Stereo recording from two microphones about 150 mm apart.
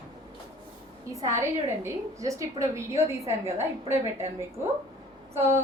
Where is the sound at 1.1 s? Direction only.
20° right (ahead or behind).